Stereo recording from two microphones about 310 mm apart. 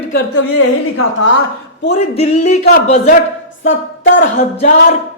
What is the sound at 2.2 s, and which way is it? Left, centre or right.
Speech, left.